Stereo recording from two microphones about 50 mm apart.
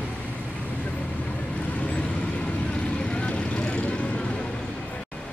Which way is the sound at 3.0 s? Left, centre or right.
Left.